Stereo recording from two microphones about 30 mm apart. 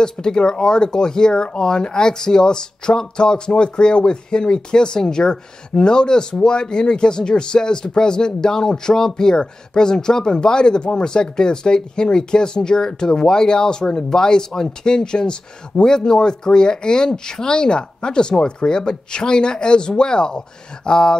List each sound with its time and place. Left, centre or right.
0.0 s speech: left